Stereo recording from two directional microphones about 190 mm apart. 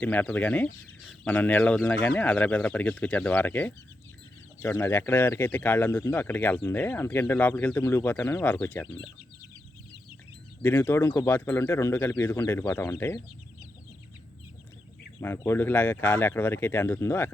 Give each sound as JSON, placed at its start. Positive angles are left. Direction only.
{"t": 0.0, "sound": "speech", "side_deg": 5}
{"t": 10.6, "sound": "speech", "side_deg": 10}
{"t": 15.2, "sound": "speech", "side_deg": 10}